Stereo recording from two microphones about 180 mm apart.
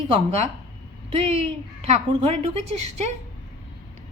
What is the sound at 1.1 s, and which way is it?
A woman's voice, 35° right (ahead or behind).